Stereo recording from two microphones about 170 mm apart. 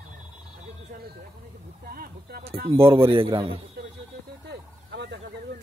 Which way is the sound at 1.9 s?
65° right (ahead or behind).